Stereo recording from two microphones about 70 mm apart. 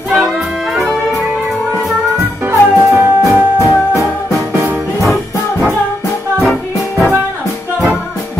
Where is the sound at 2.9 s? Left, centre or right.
Right.